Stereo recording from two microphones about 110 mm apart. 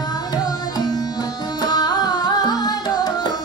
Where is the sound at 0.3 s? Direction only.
40° left (ahead or behind).